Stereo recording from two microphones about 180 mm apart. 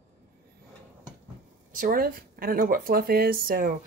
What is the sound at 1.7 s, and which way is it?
A woman's voice, 50° right (ahead or behind).